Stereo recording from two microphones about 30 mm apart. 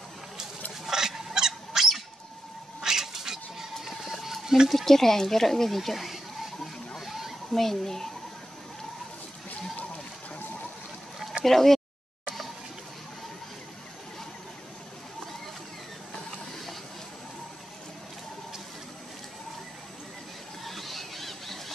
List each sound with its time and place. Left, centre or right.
0.8 s a sound: centre
2.8 s cat: centre
3.8 s a sound: centre
4.6 s speech: centre
5.8 s speech: centre
7.1 s a sound: centre
7.5 s speech: centre
11.4 s speech: centre
20.6 s squeal: centre